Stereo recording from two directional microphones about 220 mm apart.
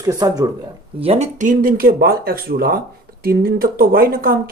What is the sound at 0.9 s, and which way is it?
Speech, 25° right (ahead or behind).